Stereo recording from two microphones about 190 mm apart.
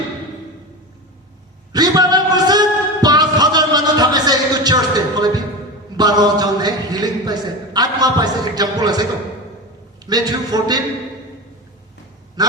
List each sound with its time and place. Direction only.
1.7 s a sound: 20° right (ahead or behind)
10.1 s a man's voice: 20° right (ahead or behind)
12.4 s quack: 20° right (ahead or behind)